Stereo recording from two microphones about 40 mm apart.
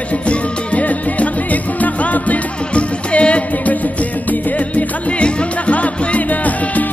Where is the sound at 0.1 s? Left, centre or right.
Left.